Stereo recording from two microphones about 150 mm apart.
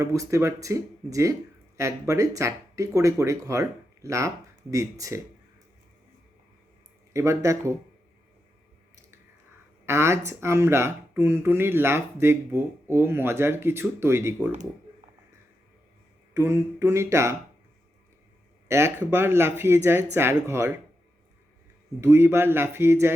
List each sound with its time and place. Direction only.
0.0 s speech: 20° right (ahead or behind)
7.1 s speech: 20° right (ahead or behind)
9.8 s speech: 15° right (ahead or behind)
16.3 s speech: 15° right (ahead or behind)
18.7 s speech: 15° right (ahead or behind)
22.0 s speech: 15° right (ahead or behind)